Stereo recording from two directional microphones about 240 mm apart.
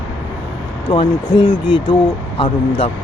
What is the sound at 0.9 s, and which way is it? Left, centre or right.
Speech, left.